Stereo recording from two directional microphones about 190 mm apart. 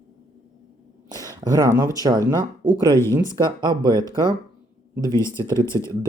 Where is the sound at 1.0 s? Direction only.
20° right (ahead or behind).